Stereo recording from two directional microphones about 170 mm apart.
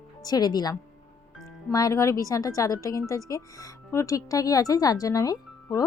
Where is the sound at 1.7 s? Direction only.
20° left (ahead or behind).